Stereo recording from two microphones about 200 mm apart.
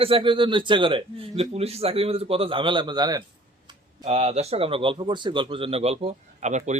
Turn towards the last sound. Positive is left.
turn(degrees=-35)  # may be behind; listen again after turning